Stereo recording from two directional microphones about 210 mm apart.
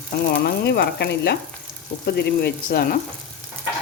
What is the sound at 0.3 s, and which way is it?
Sizzle, 55° left (ahead or behind).